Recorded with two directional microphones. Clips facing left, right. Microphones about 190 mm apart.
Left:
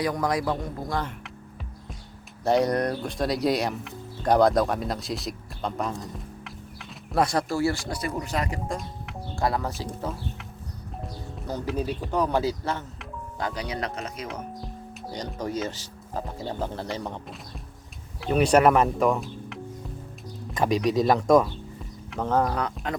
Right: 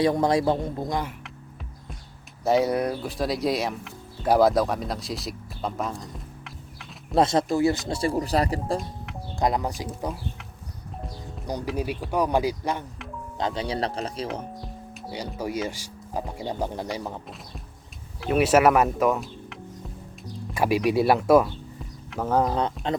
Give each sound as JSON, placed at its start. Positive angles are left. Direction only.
{"t": 0.0, "sound": "a man's voice", "side_deg": -25}
{"t": 2.4, "sound": "speech", "side_deg": 0}
{"t": 7.1, "sound": "a man's voice", "side_deg": -25}
{"t": 9.3, "sound": "speech", "side_deg": -20}
{"t": 11.7, "sound": "speech", "side_deg": -10}
{"t": 13.4, "sound": "speech", "side_deg": -25}
{"t": 15.1, "sound": "speech", "side_deg": -10}
{"t": 22.5, "sound": "a man's voice", "side_deg": -25}